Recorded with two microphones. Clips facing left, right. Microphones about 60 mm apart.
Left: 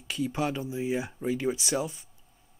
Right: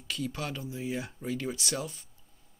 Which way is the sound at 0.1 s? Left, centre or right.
Centre.